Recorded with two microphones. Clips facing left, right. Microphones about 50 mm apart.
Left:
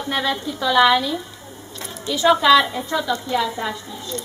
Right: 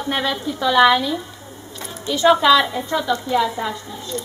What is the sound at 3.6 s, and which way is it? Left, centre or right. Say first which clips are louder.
Speech: right 1 dB; centre.